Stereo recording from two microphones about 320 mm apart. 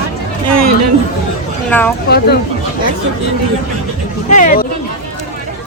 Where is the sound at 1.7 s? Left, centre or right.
Centre.